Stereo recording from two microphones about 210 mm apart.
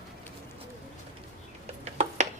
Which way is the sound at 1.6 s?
30° right (ahead or behind).